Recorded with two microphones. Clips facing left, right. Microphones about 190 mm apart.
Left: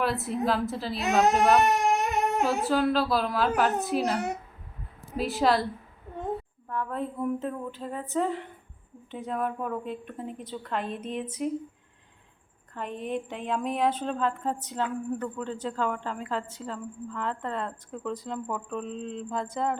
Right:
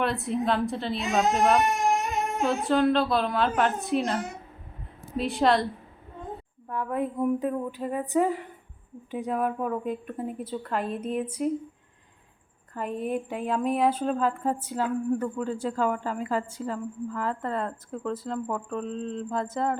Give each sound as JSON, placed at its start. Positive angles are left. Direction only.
{"t": 0.0, "sound": "speech", "side_deg": 0}
{"t": 1.6, "sound": "a sound", "side_deg": 65}
{"t": 2.4, "sound": "speech", "side_deg": 5}
{"t": 6.7, "sound": "speech", "side_deg": -15}
{"t": 12.7, "sound": "speech", "side_deg": -5}